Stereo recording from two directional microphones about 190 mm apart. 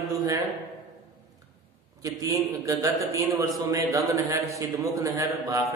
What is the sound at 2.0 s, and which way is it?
A man's voice, 20° right (ahead or behind).